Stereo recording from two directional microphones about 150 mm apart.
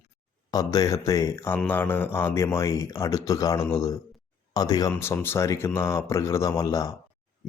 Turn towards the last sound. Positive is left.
turn(degrees=25)  # may be behind; listen again after turning